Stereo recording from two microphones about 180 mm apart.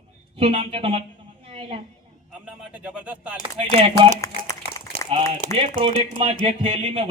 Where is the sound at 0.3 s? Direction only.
35° right (ahead or behind).